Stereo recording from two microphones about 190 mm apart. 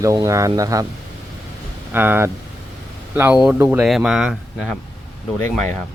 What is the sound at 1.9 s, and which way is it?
Speech, 10° right (ahead or behind).